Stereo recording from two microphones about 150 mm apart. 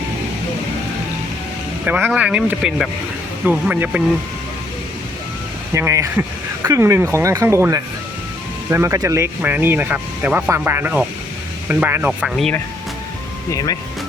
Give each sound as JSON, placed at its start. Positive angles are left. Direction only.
{"t": 1.8, "sound": "speech", "side_deg": -10}
{"t": 5.7, "sound": "speech", "side_deg": -20}
{"t": 13.5, "sound": "speech", "side_deg": 25}